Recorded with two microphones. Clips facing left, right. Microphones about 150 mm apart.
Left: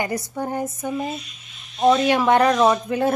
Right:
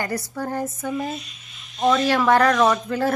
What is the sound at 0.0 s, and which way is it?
Speech, 20° left (ahead or behind).